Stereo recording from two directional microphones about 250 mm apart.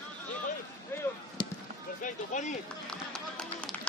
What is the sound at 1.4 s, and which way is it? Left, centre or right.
Basketball bounce, centre.